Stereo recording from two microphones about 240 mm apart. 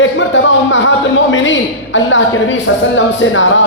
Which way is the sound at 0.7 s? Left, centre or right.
Left.